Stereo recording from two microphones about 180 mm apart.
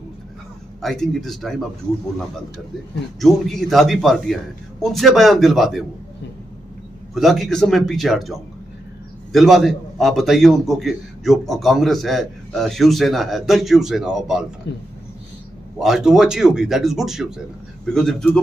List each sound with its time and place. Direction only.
0.8 s a man's voice: centre (ahead or behind)
3.2 s a man's voice: centre (ahead or behind)
7.2 s a man's voice: centre (ahead or behind)
14.7 s a man's voice: 70° left (ahead or behind)
15.8 s a man's voice: centre (ahead or behind)